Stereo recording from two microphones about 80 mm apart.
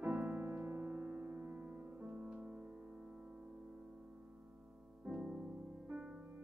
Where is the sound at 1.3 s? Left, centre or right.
Right.